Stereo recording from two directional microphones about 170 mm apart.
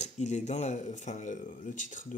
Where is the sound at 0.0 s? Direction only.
45° left (ahead or behind).